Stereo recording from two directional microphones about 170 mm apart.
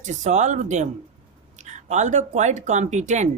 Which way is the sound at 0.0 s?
45° right (ahead or behind).